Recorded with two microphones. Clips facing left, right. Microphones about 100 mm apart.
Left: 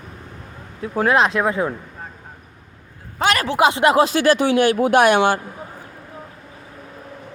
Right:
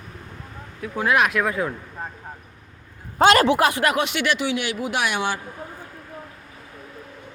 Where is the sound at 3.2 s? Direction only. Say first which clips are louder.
Right 5 dB; 30° right (ahead or behind).